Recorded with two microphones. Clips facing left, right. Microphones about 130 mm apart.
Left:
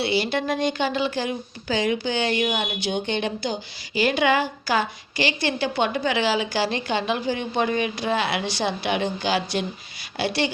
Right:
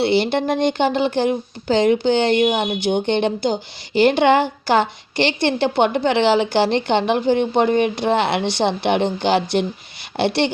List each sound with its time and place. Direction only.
0.0 s a woman's voice: 55° right (ahead or behind)
2.4 s speech: 20° right (ahead or behind)
2.8 s a woman's voice: 55° right (ahead or behind)